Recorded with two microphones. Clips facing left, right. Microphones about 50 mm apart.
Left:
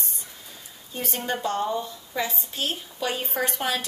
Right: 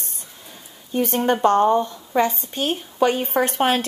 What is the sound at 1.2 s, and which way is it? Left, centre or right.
A woman's voice, right.